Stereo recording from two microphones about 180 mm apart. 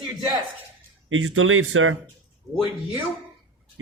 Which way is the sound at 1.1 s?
90° right.